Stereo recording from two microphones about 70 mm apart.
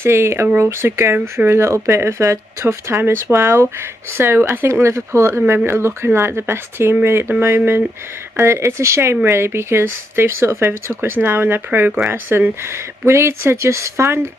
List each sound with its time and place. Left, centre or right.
0.0 s speech: right